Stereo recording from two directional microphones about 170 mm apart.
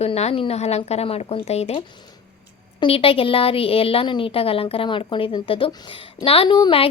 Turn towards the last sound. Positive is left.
turn(degrees=30)  # may be behind; listen again after turning